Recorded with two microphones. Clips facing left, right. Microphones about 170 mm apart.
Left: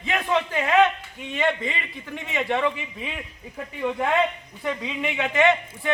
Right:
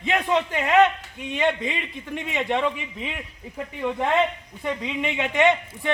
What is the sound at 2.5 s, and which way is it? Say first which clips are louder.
Speech: even; 15° right (ahead or behind).